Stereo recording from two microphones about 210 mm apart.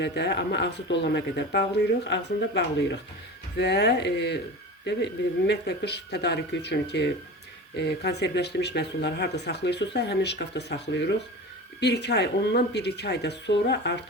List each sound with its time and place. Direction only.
0.0 s speech: 55° left (ahead or behind)